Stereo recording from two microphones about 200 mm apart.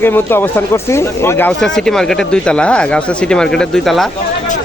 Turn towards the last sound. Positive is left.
turn(degrees=0)  # may be behind; listen again after turning